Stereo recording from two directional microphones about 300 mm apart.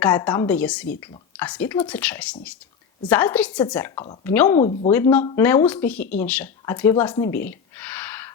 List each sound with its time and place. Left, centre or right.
0.0 s speech: centre
3.9 s speech: centre
4.5 s speech: left
4.9 s speech: centre
7.0 s a sound: centre